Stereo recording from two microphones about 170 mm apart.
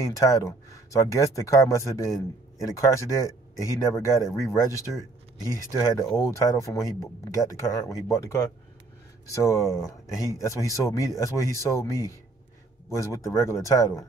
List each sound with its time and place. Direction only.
0.0 s speech: 20° left (ahead or behind)